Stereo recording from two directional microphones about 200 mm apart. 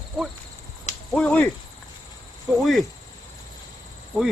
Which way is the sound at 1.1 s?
5° left (ahead or behind).